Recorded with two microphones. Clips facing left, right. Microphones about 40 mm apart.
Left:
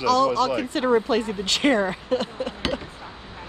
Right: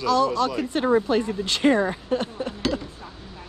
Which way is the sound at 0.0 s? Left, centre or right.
Left.